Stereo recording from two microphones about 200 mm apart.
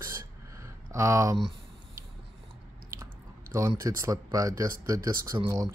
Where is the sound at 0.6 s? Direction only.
15° right (ahead or behind).